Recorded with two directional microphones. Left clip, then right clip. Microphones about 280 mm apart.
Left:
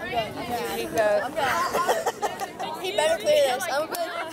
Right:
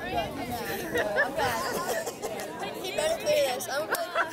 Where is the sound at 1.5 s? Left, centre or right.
Centre.